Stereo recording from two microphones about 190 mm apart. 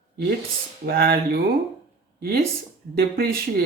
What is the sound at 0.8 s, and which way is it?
Speech, 55° right (ahead or behind).